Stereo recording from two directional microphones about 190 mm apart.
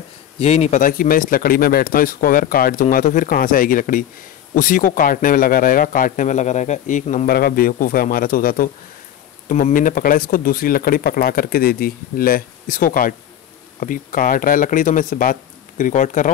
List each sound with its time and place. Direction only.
0.4 s a man's voice: 35° left (ahead or behind)